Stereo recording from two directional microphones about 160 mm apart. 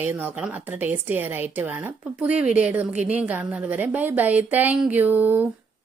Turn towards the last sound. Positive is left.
turn(degrees=-10)  # may be behind; listen again after turning